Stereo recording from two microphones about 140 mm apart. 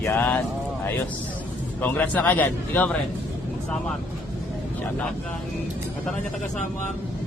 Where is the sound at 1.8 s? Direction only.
10° left (ahead or behind).